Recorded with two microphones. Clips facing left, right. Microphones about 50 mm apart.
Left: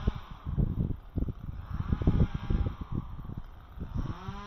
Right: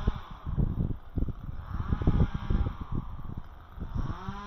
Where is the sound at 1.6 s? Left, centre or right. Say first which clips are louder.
Even; right.